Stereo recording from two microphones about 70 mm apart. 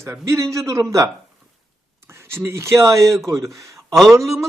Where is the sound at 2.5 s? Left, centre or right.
Right.